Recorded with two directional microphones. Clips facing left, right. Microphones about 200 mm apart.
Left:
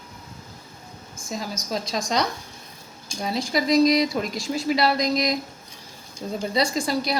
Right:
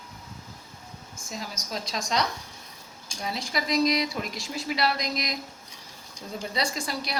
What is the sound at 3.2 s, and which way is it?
A woman's voice, 35° left (ahead or behind).